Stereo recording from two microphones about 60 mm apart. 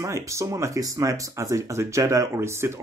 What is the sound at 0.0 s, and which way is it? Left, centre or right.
Speech, right.